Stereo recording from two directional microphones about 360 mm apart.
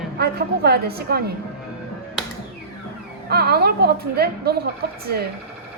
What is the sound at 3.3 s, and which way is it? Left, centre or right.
A woman's voice, right.